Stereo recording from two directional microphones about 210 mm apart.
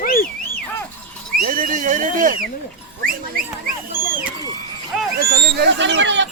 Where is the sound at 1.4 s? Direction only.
40° right (ahead or behind).